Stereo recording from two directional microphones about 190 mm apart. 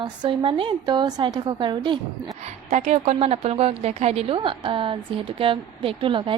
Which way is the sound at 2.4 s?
35° right (ahead or behind).